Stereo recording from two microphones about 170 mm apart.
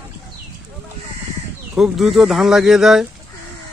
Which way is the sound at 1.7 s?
Centre (ahead or behind).